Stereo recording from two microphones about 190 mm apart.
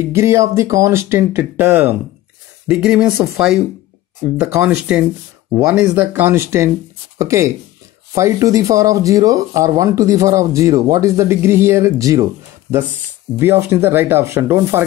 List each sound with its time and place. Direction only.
0.0 s speech: 15° right (ahead or behind)
5.5 s speech: 15° right (ahead or behind)
13.4 s speech: 10° right (ahead or behind)